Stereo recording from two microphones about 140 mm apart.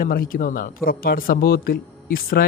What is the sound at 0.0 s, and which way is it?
Speech, 90° left.